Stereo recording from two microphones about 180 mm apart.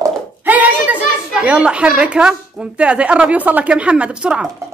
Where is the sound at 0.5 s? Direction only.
10° right (ahead or behind).